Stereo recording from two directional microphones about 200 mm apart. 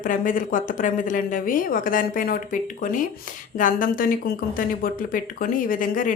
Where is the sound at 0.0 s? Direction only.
40° left (ahead or behind).